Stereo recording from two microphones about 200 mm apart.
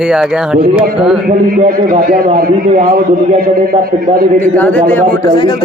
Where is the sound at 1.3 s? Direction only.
45° right (ahead or behind).